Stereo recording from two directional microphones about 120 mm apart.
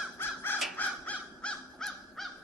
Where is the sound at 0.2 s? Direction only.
20° left (ahead or behind).